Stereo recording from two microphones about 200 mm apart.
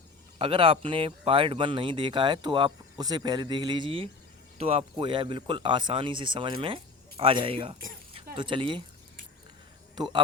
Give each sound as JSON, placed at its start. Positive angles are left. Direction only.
{"t": 0.3, "sound": "speech", "side_deg": -25}
{"t": 9.9, "sound": "speech", "side_deg": -20}